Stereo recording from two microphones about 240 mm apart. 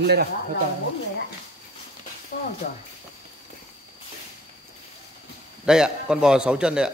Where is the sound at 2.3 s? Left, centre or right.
Left.